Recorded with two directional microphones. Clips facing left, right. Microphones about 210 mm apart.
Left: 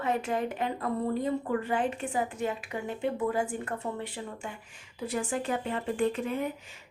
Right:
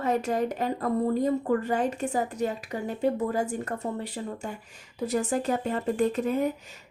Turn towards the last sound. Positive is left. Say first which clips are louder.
# right 4 dB
turn(degrees=-40)  # may be behind; listen again after turning